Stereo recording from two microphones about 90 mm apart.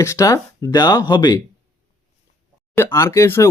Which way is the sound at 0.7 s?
50° left (ahead or behind).